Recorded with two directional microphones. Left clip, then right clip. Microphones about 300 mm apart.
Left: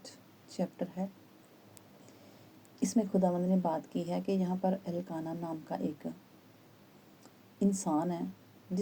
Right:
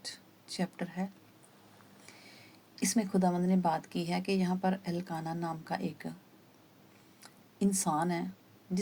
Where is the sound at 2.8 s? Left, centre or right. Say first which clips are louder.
Left 1 dB; right.